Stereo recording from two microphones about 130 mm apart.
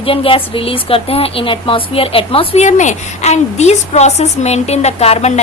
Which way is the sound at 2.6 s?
65° left (ahead or behind).